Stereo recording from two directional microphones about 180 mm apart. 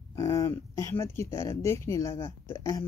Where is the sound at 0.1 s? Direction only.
20° left (ahead or behind).